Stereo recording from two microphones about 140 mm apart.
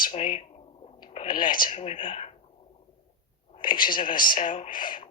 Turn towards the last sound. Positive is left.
turn(degrees=80)